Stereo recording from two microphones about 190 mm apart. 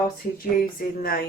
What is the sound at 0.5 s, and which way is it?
Speech, 50° left (ahead or behind).